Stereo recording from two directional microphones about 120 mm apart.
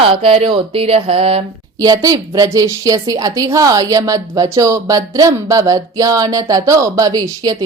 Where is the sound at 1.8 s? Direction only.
30° right (ahead or behind).